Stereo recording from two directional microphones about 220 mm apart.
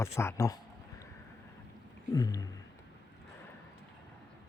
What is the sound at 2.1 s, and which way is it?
Speech, 15° left (ahead or behind).